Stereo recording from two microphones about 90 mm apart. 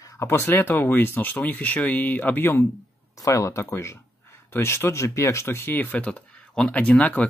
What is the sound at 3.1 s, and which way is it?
Speech, 35° left (ahead or behind).